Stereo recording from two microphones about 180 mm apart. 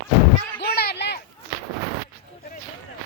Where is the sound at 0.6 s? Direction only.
60° left (ahead or behind).